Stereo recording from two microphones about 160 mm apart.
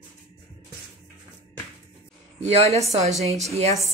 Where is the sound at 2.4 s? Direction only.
40° right (ahead or behind).